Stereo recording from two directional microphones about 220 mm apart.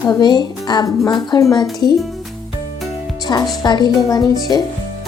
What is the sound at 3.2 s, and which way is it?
Music, 20° left (ahead or behind).